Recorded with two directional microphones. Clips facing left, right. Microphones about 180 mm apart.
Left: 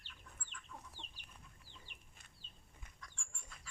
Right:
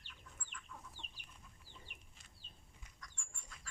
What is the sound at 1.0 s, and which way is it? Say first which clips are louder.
Chicken: left 1 dB; 20° left (ahead or behind).